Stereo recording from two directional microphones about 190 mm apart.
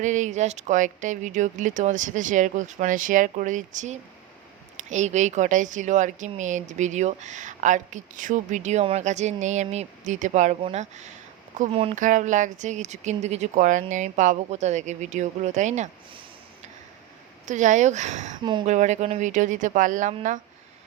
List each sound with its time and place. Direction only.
0.0 s a woman's voice: 40° right (ahead or behind)
17.4 s a woman's voice: 40° right (ahead or behind)
18.3 s speech: 25° right (ahead or behind)
18.6 s a woman's voice: 40° right (ahead or behind)